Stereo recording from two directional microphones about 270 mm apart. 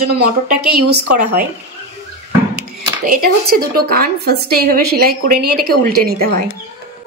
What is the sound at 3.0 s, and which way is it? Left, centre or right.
A woman's voice, right.